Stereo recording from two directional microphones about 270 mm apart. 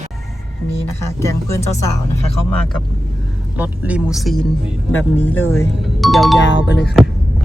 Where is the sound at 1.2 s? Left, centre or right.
Centre.